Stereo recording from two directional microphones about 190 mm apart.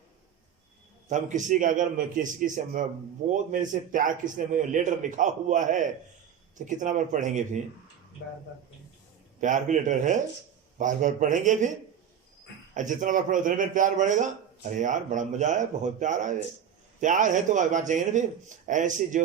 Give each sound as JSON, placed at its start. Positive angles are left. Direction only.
{"t": 1.1, "sound": "a man's voice", "side_deg": -40}
{"t": 9.4, "sound": "a man's voice", "side_deg": -40}
{"t": 12.7, "sound": "a man's voice", "side_deg": -40}